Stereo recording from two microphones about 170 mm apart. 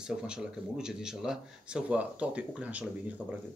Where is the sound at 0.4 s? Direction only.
5° right (ahead or behind).